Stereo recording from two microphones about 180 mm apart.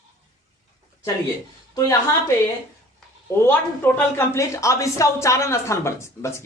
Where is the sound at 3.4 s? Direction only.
10° left (ahead or behind).